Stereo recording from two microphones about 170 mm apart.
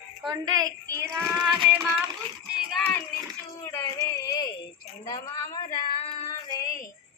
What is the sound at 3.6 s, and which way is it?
Speech, 20° left (ahead or behind).